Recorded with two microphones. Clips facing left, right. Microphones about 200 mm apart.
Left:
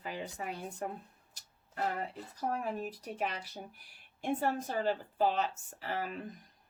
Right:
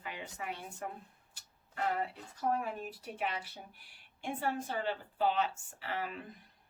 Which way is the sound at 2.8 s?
40° left (ahead or behind).